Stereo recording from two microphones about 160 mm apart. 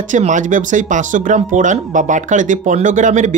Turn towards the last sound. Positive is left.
turn(degrees=-50)  # may be behind; listen again after turning